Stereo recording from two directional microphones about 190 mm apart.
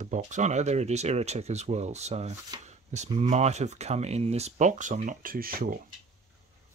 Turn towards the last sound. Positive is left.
turn(degrees=-50)  # may be behind; listen again after turning